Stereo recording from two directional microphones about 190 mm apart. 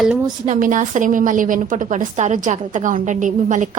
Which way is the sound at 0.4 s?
45° right (ahead or behind).